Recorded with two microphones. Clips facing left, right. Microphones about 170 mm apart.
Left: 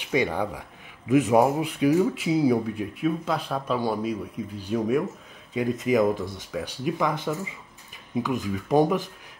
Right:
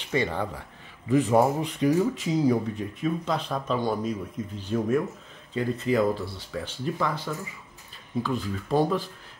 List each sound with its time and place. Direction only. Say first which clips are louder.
0.0 s speech: left 2 dB; 10° left (ahead or behind)